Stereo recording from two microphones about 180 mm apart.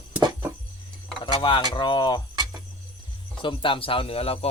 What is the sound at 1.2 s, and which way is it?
Speech, 25° left (ahead or behind).